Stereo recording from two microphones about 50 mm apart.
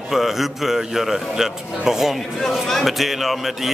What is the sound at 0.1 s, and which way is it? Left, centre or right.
A man's voice, centre.